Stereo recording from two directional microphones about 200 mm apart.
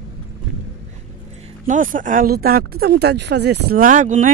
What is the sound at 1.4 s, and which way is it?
Speech, 40° right (ahead or behind).